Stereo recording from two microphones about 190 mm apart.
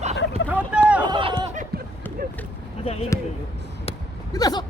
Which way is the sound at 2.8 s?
30° left (ahead or behind).